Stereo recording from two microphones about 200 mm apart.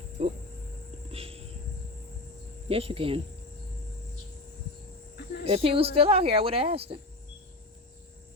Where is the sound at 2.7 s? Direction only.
30° right (ahead or behind).